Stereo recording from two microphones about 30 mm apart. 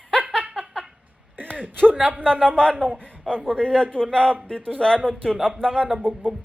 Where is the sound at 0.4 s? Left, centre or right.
Right.